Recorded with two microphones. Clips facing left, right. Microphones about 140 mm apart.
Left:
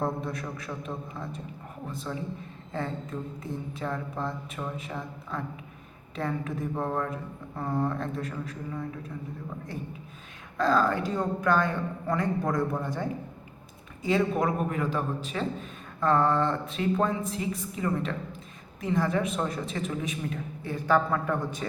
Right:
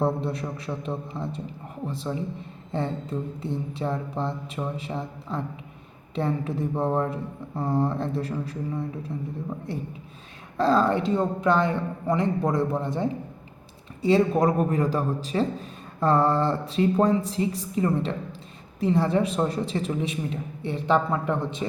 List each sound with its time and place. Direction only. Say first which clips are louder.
0.0 s speech: right 5 dB; 30° right (ahead or behind)
10.6 s speech: right 3 dB; 30° right (ahead or behind)
14.0 s a man's voice: right 5 dB; 35° right (ahead or behind)